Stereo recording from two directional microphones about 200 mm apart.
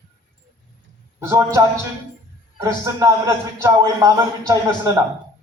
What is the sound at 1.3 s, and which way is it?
Speech, 15° right (ahead or behind).